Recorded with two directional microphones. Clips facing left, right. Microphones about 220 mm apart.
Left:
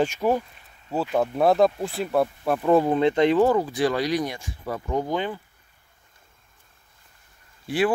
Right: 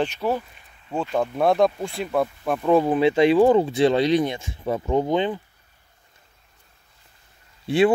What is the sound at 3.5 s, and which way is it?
Speech, 25° right (ahead or behind).